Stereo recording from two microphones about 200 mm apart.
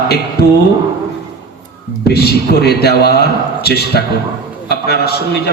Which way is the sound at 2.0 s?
55° left (ahead or behind).